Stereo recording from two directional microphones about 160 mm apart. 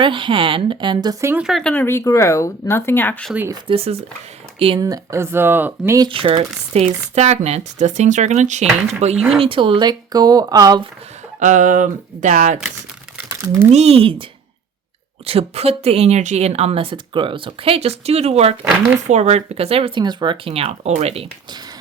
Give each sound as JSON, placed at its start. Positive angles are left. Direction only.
{"t": 0.0, "sound": "speech", "side_deg": -30}
{"t": 1.2, "sound": "speech", "side_deg": -15}
{"t": 1.5, "sound": "speech", "side_deg": 5}
{"t": 3.5, "sound": "speech", "side_deg": -35}
{"t": 6.1, "sound": "speech", "side_deg": -35}
{"t": 11.3, "sound": "speech", "side_deg": -50}
{"t": 13.1, "sound": "crumpling", "side_deg": -15}
{"t": 13.7, "sound": "speech", "side_deg": -40}
{"t": 15.3, "sound": "speech", "side_deg": -40}